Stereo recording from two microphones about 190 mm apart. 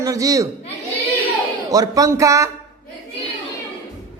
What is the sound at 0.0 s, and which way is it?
Speech, 20° right (ahead or behind).